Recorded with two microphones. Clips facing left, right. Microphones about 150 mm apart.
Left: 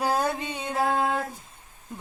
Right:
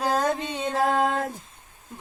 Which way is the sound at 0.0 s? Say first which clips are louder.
Right 1 dB; 10° left (ahead or behind).